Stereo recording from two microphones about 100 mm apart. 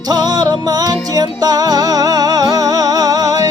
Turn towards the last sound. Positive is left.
turn(degrees=-40)  # may be behind; listen again after turning